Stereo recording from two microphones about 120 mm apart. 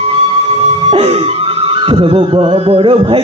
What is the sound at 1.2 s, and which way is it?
Music, 50° right (ahead or behind).